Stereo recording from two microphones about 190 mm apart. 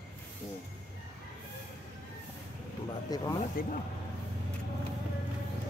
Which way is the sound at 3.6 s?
50° left (ahead or behind).